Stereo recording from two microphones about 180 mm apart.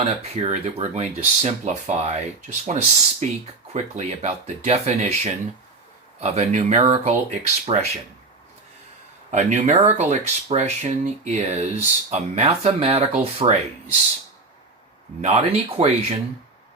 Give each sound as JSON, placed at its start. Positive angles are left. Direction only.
{"t": 0.0, "sound": "speech", "side_deg": -35}
{"t": 9.3, "sound": "speech", "side_deg": -40}
{"t": 15.2, "sound": "speech", "side_deg": -35}